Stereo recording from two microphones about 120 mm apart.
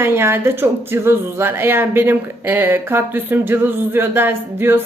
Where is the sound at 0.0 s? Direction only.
20° right (ahead or behind).